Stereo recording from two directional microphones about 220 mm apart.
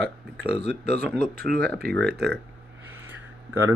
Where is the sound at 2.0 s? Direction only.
45° right (ahead or behind).